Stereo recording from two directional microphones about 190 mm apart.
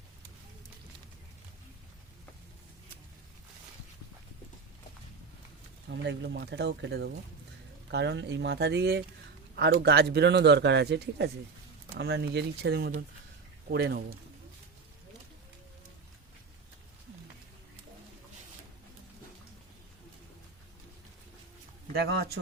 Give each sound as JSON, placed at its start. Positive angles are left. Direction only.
{"t": 5.9, "sound": "speech", "side_deg": -65}
{"t": 21.9, "sound": "speech", "side_deg": -55}